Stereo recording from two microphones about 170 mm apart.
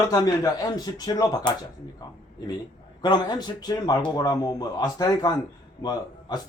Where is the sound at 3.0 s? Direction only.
25° left (ahead or behind).